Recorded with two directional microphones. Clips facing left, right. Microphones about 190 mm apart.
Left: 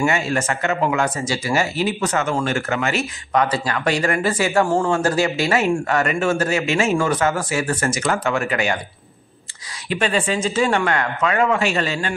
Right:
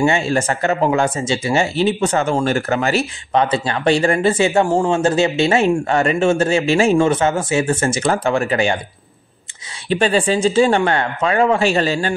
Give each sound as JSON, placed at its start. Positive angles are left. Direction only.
{"t": 0.0, "sound": "speech", "side_deg": -30}
{"t": 9.8, "sound": "speech", "side_deg": -30}